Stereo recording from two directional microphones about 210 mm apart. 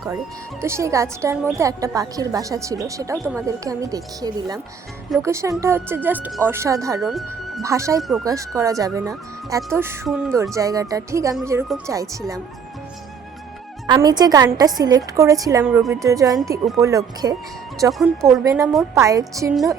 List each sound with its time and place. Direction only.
0.6 s a woman's voice: 15° right (ahead or behind)
7.0 s speech: centre (ahead or behind)
7.6 s a woman's voice: 15° right (ahead or behind)
10.1 s speech: centre (ahead or behind)
10.5 s a woman's voice: 15° right (ahead or behind)
13.8 s a woman's voice: 20° right (ahead or behind)